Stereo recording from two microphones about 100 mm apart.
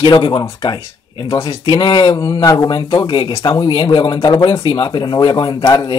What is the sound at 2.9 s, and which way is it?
Speech, 55° left (ahead or behind).